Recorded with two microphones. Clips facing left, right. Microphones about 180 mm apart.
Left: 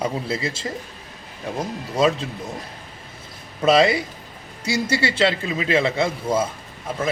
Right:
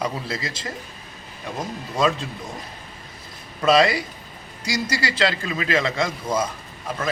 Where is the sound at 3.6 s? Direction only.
25° left (ahead or behind).